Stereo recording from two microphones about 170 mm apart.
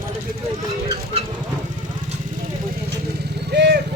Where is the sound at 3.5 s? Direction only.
75° right (ahead or behind).